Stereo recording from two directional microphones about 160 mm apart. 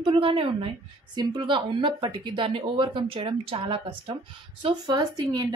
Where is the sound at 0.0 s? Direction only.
35° right (ahead or behind).